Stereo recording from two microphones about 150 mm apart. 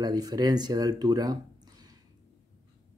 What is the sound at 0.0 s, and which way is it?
Speech, 25° right (ahead or behind).